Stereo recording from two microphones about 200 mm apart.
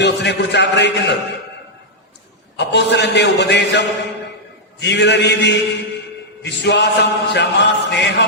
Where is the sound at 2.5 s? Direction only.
60° left (ahead or behind).